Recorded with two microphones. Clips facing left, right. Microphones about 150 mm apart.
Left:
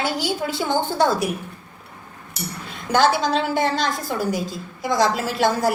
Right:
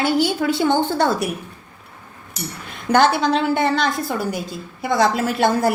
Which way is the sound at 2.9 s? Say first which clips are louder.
Right 2 dB; 60° right (ahead or behind).